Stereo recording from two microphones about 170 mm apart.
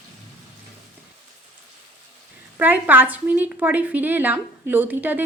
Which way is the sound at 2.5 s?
10° right (ahead or behind).